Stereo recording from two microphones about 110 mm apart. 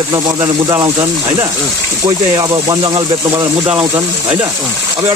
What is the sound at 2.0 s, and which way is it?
Speech, 40° right (ahead or behind).